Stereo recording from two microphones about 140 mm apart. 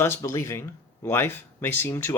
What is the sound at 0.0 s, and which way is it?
Speech, 20° left (ahead or behind).